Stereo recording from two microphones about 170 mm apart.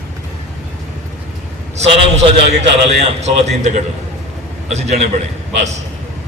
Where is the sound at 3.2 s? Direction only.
40° right (ahead or behind).